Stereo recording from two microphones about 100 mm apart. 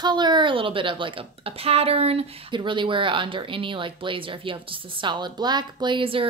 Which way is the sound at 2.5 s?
55° right (ahead or behind).